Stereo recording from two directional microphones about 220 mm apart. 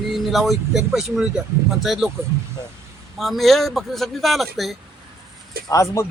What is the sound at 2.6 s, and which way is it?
Speech, 15° left (ahead or behind).